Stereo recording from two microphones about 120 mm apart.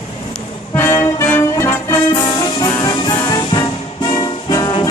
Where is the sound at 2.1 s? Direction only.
30° left (ahead or behind).